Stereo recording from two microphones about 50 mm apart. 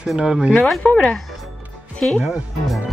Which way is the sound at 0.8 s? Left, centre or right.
Left.